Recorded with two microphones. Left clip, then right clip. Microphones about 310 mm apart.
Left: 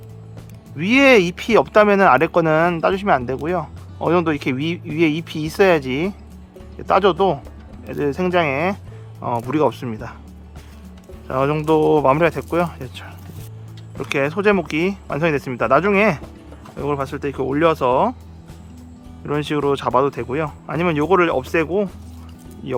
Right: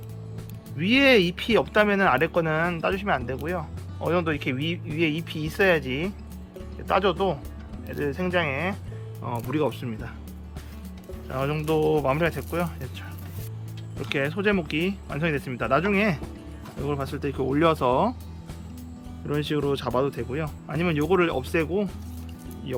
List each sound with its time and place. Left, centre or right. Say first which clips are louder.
0.8 s speech: left 6 dB; centre
11.3 s speech: left 9 dB; centre
19.2 s speech: left 6 dB; centre